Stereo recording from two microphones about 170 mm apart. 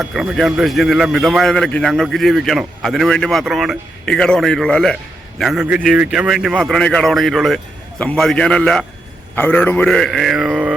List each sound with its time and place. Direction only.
0.0 s a man's voice: 5° right (ahead or behind)